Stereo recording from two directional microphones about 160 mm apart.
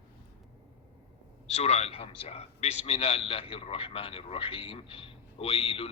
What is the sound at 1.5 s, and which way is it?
A man's voice, 40° left (ahead or behind).